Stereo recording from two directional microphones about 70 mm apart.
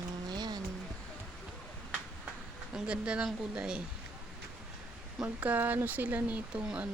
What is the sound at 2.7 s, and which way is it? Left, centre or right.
Speech, centre.